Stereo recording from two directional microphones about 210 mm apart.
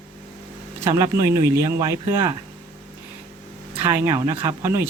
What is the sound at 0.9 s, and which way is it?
Speech, 15° right (ahead or behind).